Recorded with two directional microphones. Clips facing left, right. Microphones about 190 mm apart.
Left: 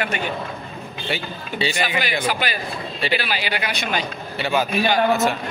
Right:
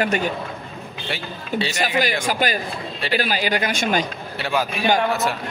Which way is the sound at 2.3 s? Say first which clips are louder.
Right 2 dB; 45° right (ahead or behind).